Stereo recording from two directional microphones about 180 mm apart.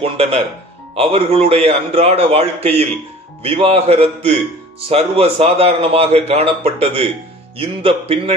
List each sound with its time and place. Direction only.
0.0 s speech: 35° right (ahead or behind)